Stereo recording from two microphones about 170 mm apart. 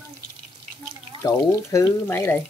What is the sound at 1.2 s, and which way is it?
Speech, 20° left (ahead or behind).